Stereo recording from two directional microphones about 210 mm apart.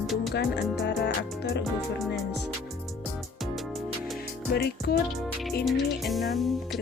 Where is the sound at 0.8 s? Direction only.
50° left (ahead or behind).